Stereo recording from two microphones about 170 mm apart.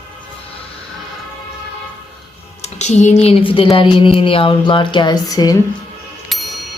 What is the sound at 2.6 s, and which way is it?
Speech, 45° left (ahead or behind).